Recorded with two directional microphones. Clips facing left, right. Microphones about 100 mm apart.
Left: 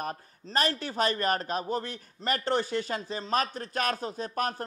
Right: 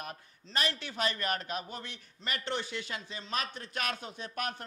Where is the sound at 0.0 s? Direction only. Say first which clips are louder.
Left 8 dB; 40° left (ahead or behind).